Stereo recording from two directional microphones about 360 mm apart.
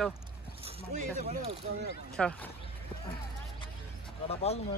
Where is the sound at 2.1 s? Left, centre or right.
Centre.